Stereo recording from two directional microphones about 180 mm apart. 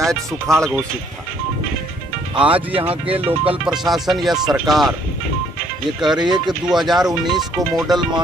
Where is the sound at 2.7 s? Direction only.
30° right (ahead or behind).